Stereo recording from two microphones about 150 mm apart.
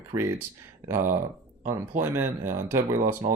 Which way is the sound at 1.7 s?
15° right (ahead or behind).